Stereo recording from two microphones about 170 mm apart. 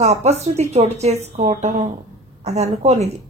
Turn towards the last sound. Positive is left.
turn(degrees=-40)  # may be behind; listen again after turning